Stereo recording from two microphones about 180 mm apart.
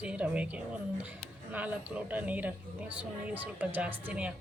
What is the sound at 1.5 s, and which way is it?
Speech, 10° right (ahead or behind).